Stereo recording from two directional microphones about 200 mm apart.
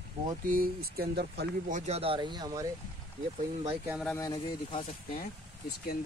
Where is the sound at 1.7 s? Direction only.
30° right (ahead or behind).